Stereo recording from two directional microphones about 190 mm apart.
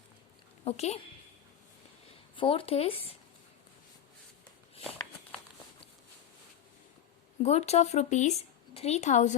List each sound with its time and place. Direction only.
0.6 s a woman's voice: 35° left (ahead or behind)
2.3 s speech: 25° left (ahead or behind)
7.4 s speech: 35° left (ahead or behind)